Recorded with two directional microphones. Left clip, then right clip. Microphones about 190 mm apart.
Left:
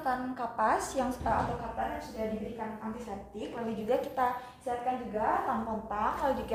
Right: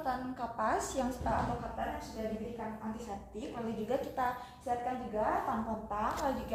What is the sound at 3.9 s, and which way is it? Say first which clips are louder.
Speech: left 5 dB; 30° left (ahead or behind).